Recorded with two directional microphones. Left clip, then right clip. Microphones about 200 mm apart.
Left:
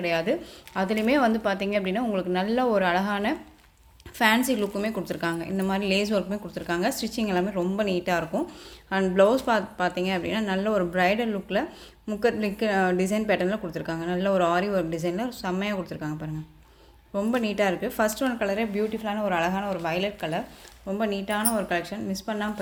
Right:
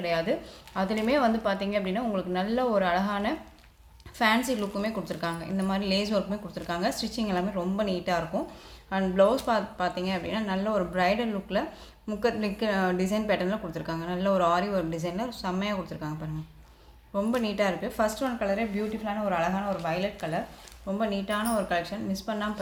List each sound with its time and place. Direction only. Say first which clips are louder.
0.0 s a woman's voice: left 2 dB; 35° left (ahead or behind)